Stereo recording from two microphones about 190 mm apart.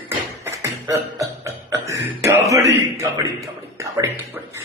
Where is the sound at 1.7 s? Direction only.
15° right (ahead or behind).